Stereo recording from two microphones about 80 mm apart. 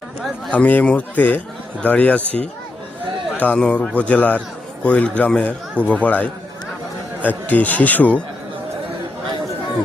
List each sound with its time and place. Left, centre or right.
0.5 s a man's voice: centre